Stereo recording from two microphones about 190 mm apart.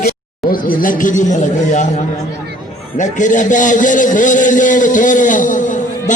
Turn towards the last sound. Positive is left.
turn(degrees=40)  # may be behind; listen again after turning